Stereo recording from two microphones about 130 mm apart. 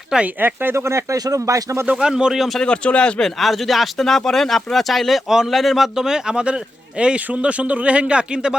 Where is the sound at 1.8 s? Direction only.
5° right (ahead or behind).